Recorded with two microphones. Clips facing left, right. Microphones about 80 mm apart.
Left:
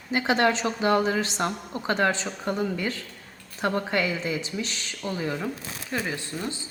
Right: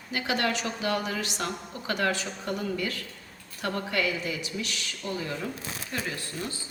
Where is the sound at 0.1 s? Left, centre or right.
Left.